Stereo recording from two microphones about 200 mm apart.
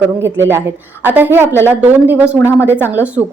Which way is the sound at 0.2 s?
10° right (ahead or behind).